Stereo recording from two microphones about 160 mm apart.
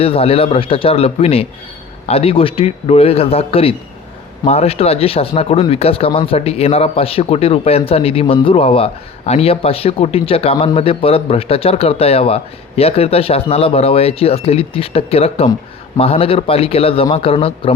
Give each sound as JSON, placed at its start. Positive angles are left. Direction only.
{"t": 0.0, "sound": "speech", "side_deg": 35}